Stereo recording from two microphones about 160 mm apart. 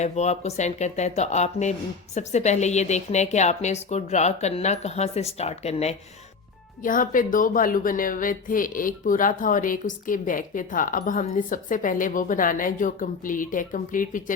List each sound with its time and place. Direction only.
0.0 s a woman's voice: 45° left (ahead or behind)
6.8 s speech: 60° left (ahead or behind)